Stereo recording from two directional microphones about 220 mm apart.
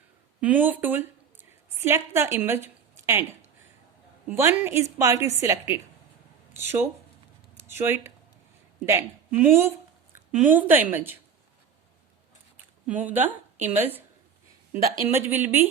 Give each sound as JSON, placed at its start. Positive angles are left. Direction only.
{"t": 0.4, "sound": "a woman's voice", "side_deg": -5}
{"t": 4.3, "sound": "a woman's voice", "side_deg": -10}
{"t": 12.8, "sound": "a woman's voice", "side_deg": -5}